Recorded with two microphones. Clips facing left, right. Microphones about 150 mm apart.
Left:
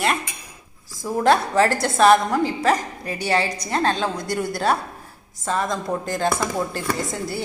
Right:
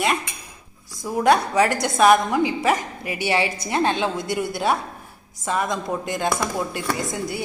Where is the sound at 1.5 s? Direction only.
15° right (ahead or behind).